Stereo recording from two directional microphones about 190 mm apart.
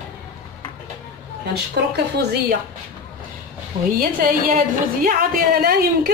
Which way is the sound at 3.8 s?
50° right (ahead or behind).